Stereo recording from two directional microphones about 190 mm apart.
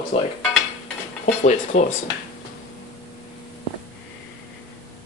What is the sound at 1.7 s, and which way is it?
Speech, 35° left (ahead or behind).